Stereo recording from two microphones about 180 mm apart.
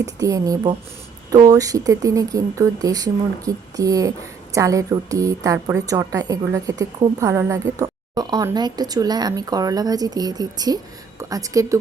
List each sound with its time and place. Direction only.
0.0 s a woman's voice: 20° right (ahead or behind)